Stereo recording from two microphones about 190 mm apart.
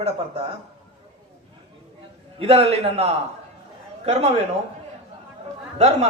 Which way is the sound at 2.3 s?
30° right (ahead or behind).